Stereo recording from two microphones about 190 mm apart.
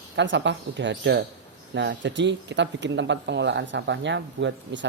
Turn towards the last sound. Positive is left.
turn(degrees=-70)  # may be behind; listen again after turning